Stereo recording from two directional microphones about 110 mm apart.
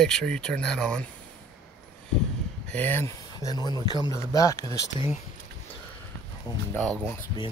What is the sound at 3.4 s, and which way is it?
Speech, 35° left (ahead or behind).